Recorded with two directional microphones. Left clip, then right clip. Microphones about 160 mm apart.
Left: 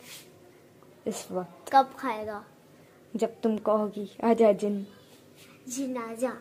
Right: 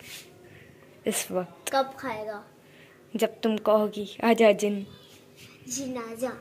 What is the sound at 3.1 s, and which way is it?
A woman's voice, 5° left (ahead or behind).